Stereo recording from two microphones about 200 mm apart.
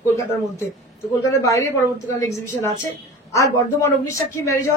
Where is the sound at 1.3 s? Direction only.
15° left (ahead or behind).